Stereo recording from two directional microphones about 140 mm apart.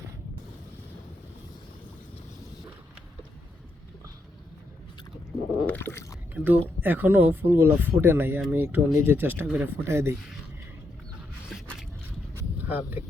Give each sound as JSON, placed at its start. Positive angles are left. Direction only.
{"t": 5.6, "sound": "speech", "side_deg": 15}
{"t": 6.3, "sound": "speech", "side_deg": -15}
{"t": 11.4, "sound": "scrape", "side_deg": 0}
{"t": 12.3, "sound": "a sound", "side_deg": -15}